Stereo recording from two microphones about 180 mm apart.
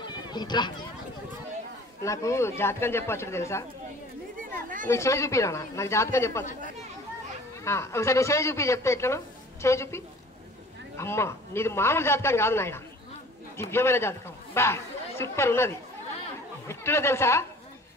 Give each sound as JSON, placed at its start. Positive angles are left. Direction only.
{"t": 0.1, "sound": "run", "side_deg": 25}
{"t": 2.0, "sound": "a man's voice", "side_deg": 15}
{"t": 4.4, "sound": "a sound", "side_deg": -50}
{"t": 4.8, "sound": "a man's voice", "side_deg": 15}
{"t": 7.6, "sound": "a man's voice", "side_deg": 15}